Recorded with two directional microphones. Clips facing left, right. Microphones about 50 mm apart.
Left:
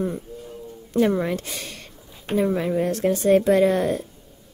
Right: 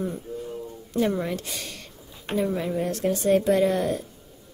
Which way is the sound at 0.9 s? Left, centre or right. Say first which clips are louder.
Left 4 dB; left.